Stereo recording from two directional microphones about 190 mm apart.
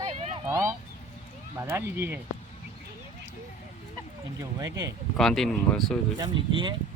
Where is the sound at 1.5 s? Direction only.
15° right (ahead or behind).